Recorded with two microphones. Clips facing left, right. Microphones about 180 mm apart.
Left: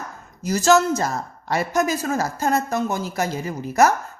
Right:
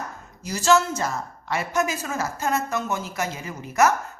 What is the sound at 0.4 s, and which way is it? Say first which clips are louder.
A woman's voice: left 3 dB; 40° left (ahead or behind).